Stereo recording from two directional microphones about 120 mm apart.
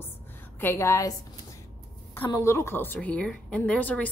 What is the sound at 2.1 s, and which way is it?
A woman's voice, 15° left (ahead or behind).